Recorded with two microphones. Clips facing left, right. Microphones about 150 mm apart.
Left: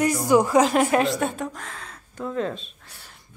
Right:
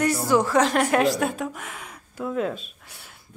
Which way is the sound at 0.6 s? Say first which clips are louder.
Even; 5° left (ahead or behind).